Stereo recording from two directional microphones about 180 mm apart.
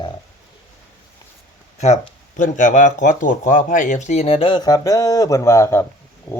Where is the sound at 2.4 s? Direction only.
45° left (ahead or behind); by 5.9 s 15° left (ahead or behind).